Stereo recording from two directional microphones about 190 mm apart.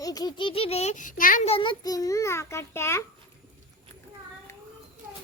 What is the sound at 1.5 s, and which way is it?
A child's voice, 25° left (ahead or behind).